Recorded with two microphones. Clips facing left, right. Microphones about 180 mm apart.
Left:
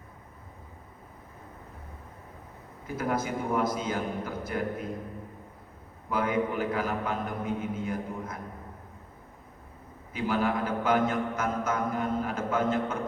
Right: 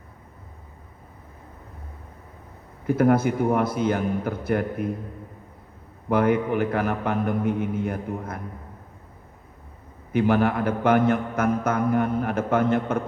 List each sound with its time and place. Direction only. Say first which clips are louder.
2.8 s a man's voice: right 11 dB; 60° right (ahead or behind)
6.1 s a man's voice: right 7 dB; 60° right (ahead or behind)
10.1 s a man's voice: right 7 dB; 65° right (ahead or behind)